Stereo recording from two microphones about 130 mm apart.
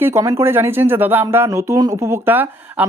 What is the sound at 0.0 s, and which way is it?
Speech, 20° right (ahead or behind).